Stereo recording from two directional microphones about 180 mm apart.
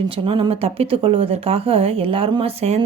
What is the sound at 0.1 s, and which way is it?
Speech, 30° right (ahead or behind).